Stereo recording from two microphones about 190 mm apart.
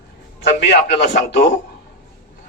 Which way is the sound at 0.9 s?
35° left (ahead or behind).